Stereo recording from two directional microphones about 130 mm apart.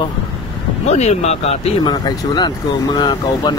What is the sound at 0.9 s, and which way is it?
Speech, 55° left (ahead or behind).